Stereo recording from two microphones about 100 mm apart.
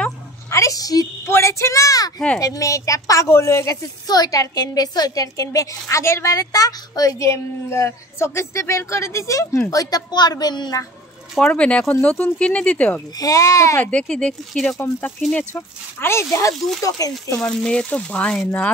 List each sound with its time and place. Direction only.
0.5 s a sound: 35° left (ahead or behind)
1.2 s a woman's voice: 25° left (ahead or behind); by 10.8 s 45° left (ahead or behind)
11.3 s speech: 10° left (ahead or behind)
13.1 s a woman's voice: 35° left (ahead or behind)
13.8 s speech: 10° left (ahead or behind)
14.8 s a woman's voice: 20° left (ahead or behind); by 17.1 s 35° left (ahead or behind)
17.5 s speech: 10° left (ahead or behind)